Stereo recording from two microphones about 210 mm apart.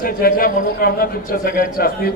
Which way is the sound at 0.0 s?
45° left (ahead or behind).